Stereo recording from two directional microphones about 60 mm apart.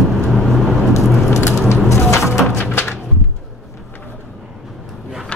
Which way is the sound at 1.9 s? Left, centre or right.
Left.